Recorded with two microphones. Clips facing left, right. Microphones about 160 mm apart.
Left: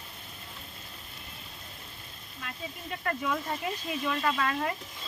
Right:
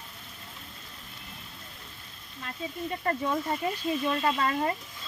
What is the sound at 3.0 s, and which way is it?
Speech, 30° right (ahead or behind).